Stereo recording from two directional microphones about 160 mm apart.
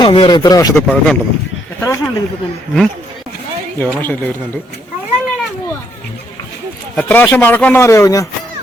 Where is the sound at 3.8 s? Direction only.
10° left (ahead or behind).